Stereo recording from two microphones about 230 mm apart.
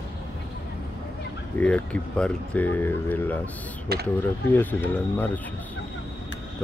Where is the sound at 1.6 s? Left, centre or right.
Centre.